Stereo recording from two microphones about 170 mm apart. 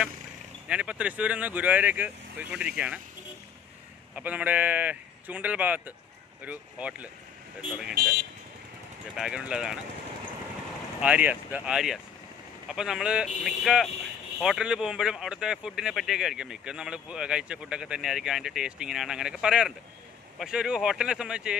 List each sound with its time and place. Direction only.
0.7 s speech: 5° right (ahead or behind)
4.1 s speech: 10° right (ahead or behind)
7.9 s speech: 70° right (ahead or behind)
9.1 s speech: 5° right (ahead or behind)
11.0 s speech: 10° right (ahead or behind)